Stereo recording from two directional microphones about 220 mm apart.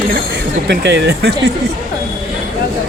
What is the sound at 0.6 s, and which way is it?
Speech, 50° right (ahead or behind).